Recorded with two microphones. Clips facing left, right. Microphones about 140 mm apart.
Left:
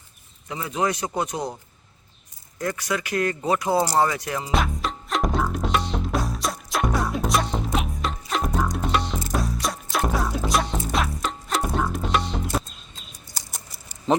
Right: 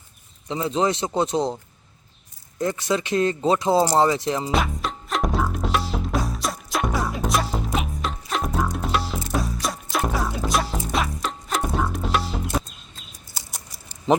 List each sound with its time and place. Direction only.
0.4 s speech: 25° right (ahead or behind)
2.6 s speech: 25° right (ahead or behind)
4.5 s music: centre (ahead or behind)
14.1 s a sound: 15° right (ahead or behind)